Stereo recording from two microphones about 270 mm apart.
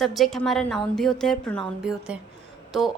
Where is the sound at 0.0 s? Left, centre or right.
Centre.